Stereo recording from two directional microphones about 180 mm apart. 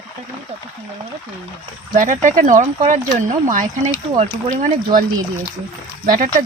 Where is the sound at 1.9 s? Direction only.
45° right (ahead or behind).